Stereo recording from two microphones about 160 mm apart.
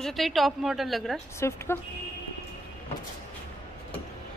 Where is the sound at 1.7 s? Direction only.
15° left (ahead or behind).